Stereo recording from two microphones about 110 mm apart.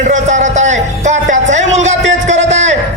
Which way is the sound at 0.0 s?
90° right.